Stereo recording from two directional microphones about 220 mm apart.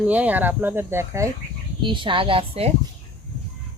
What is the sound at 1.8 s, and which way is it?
Speech, 20° right (ahead or behind).